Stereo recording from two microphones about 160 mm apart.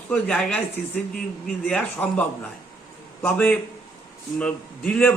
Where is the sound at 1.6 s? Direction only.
10° left (ahead or behind).